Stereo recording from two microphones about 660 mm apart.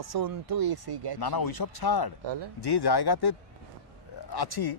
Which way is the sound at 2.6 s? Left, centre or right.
Left.